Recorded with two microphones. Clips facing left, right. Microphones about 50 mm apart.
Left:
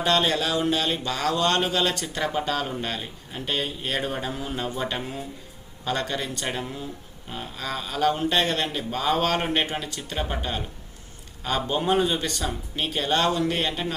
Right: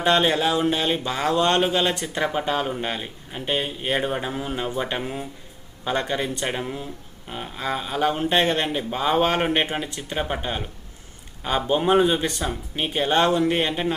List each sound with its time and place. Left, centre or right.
0.0 s speech: right